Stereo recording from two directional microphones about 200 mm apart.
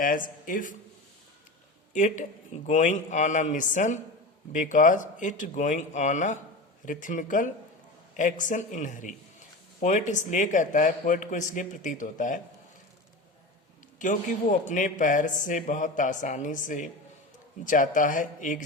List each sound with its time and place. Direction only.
0.0 s speech: 45° left (ahead or behind)
1.9 s a man's voice: 40° left (ahead or behind)
14.0 s a man's voice: 40° left (ahead or behind)